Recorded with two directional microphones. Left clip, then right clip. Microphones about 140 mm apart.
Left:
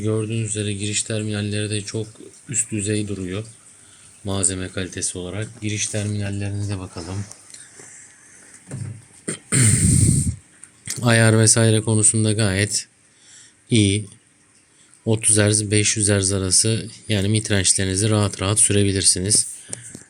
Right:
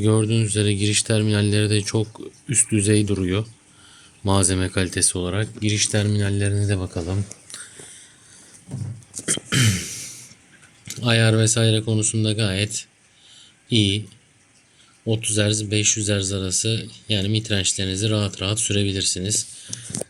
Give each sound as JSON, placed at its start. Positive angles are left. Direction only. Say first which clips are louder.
{"t": 0.0, "sound": "speech", "louder": "right 3 dB", "side_deg": -45}
{"t": 9.2, "sound": "throat clearing", "louder": "right 1 dB", "side_deg": 25}
{"t": 10.8, "sound": "speech", "louder": "left 2 dB", "side_deg": 40}
{"t": 13.3, "sound": "a sound", "louder": "left 1 dB", "side_deg": 35}
{"t": 15.0, "sound": "speech", "louder": "left 3 dB", "side_deg": 35}